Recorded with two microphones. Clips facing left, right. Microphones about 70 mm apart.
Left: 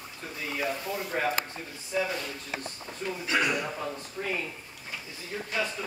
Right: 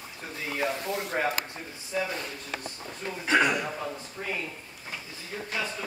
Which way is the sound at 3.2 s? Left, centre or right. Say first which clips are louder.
Right 4 dB; right.